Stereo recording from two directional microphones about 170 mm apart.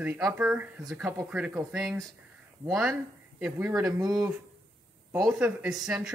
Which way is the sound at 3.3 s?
10° right (ahead or behind).